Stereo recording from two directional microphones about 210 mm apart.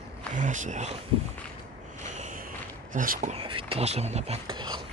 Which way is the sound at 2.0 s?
35° right (ahead or behind).